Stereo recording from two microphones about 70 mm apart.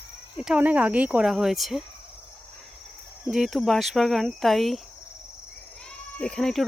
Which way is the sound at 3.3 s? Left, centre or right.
Centre.